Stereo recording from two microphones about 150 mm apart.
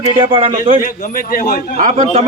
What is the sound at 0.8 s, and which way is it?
Speech, 65° left (ahead or behind).